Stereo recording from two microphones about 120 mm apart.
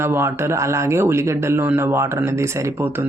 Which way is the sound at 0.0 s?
20° right (ahead or behind).